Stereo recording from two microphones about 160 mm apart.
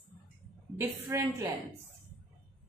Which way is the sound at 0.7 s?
15° right (ahead or behind).